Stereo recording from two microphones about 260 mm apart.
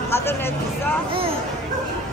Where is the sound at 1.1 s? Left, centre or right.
Right.